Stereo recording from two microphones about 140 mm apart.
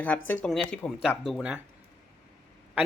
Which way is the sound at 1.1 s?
Centre (ahead or behind).